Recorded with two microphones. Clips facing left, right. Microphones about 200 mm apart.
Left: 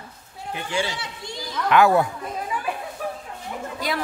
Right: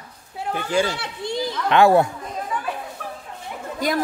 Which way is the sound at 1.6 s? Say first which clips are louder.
Right 2 dB; 25° right (ahead or behind).